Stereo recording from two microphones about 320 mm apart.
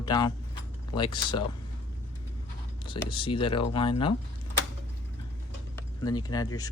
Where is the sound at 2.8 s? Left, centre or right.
Centre.